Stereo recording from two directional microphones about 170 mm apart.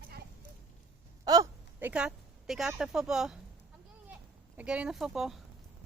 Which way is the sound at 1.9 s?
5° right (ahead or behind).